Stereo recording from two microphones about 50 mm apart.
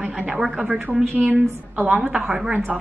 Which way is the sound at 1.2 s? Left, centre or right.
Right.